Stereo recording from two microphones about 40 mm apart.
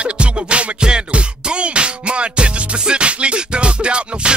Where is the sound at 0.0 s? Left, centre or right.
Right.